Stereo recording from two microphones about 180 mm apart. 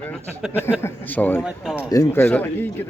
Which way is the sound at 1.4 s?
5° right (ahead or behind).